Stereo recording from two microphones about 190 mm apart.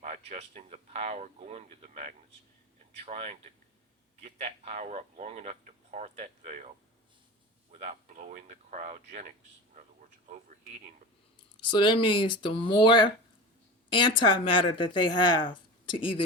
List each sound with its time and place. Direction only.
0.0 s speech: 30° right (ahead or behind)
7.8 s speech: 35° right (ahead or behind)
11.5 s speech: 25° left (ahead or behind)